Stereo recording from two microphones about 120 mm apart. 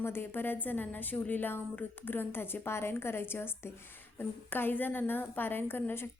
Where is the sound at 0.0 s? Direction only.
20° left (ahead or behind).